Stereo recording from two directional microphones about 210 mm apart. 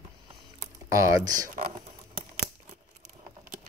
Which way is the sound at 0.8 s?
15° right (ahead or behind).